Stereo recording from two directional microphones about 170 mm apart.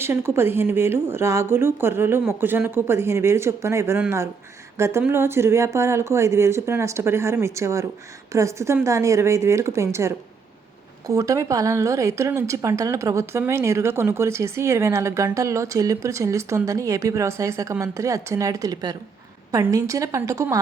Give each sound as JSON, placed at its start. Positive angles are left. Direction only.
{"t": 0.0, "sound": "a woman's voice", "side_deg": -15}